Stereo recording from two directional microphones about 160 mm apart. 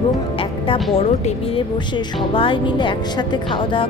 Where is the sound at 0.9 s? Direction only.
40° left (ahead or behind).